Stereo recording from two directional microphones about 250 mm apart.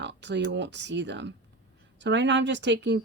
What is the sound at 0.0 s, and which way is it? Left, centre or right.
Speech, right.